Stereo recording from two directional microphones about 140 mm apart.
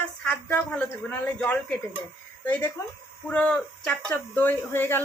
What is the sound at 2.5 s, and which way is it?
Speech, 15° left (ahead or behind).